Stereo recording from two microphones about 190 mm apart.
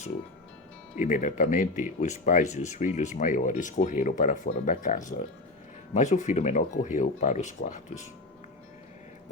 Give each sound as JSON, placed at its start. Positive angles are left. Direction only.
{"t": 0.9, "sound": "speech", "side_deg": 40}